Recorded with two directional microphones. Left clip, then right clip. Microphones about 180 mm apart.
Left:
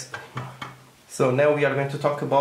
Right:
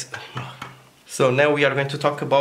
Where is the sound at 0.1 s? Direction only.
5° right (ahead or behind).